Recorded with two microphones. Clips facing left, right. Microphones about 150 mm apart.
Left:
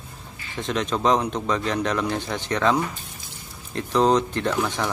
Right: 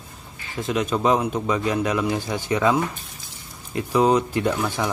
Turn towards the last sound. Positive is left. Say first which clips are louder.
# right 1 dB
turn(degrees=-10)  # may be behind; listen again after turning